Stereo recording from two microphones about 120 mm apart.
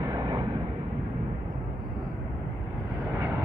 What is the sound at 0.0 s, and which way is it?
Vehicle, 30° right (ahead or behind).